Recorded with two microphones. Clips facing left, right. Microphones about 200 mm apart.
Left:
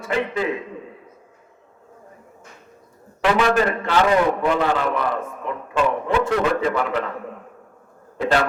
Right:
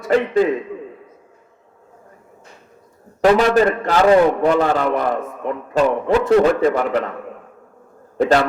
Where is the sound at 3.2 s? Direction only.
40° right (ahead or behind).